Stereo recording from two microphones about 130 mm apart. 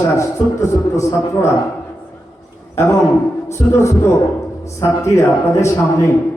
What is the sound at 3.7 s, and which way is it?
A man's voice, 25° left (ahead or behind).